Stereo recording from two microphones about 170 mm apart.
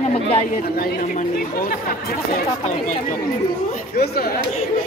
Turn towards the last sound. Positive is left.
turn(degrees=65)  # may be behind; listen again after turning